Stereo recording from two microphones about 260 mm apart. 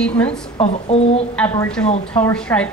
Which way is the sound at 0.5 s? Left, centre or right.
Left.